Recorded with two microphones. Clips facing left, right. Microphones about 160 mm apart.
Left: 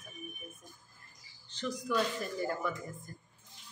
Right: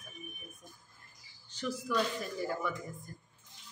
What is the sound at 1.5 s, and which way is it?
A woman's voice, 10° right (ahead or behind).